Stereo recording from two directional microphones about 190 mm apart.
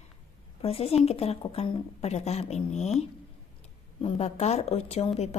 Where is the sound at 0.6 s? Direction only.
30° left (ahead or behind).